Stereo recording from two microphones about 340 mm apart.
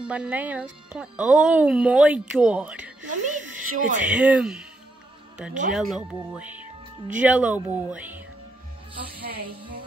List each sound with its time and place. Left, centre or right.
0.0 s speech: centre
3.1 s speech: right
4.0 s speech: centre
5.8 s speech: centre